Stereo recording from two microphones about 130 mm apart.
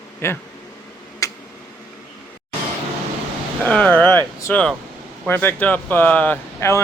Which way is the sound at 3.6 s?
10° left (ahead or behind).